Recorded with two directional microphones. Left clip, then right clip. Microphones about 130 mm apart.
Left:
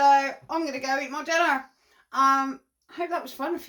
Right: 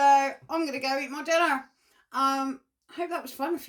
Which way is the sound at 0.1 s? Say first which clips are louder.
Left 1 dB; 25° right (ahead or behind).